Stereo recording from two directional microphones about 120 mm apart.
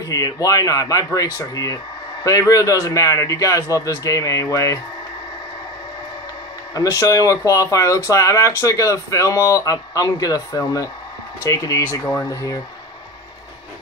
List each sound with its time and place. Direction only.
0.0 s speech: 30° left (ahead or behind)
6.7 s speech: 30° left (ahead or behind)